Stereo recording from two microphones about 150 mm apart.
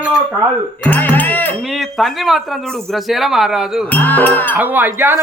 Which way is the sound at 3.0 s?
Centre (ahead or behind).